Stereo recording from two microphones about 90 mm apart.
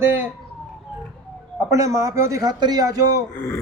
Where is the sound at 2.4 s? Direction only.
50° right (ahead or behind).